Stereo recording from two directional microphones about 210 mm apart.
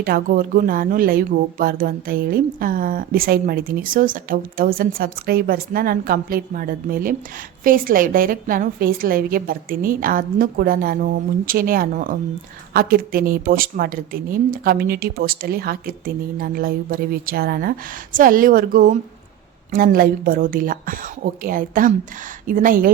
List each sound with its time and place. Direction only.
0.0 s a woman's voice: 45° right (ahead or behind)